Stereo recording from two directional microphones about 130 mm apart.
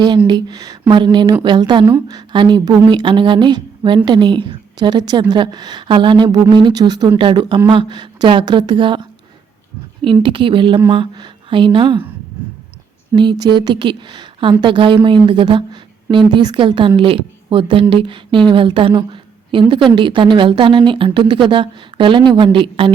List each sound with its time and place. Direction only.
0.3 s a woman's voice: 35° right (ahead or behind)
13.1 s a woman's voice: 35° right (ahead or behind)